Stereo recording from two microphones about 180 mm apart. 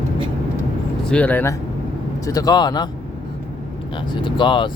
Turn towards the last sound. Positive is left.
turn(degrees=25)  # may be behind; listen again after turning